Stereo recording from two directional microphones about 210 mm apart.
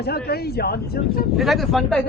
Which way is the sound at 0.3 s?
50° left (ahead or behind).